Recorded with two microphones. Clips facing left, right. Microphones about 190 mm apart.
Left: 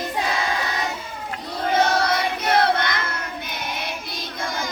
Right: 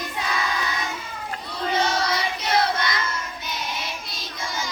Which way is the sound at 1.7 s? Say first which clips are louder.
Left 4 dB; 55° left (ahead or behind).